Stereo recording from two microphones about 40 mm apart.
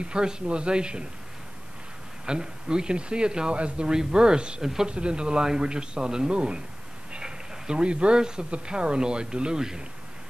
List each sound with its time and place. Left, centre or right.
0.0 s speech: right
2.2 s speech: right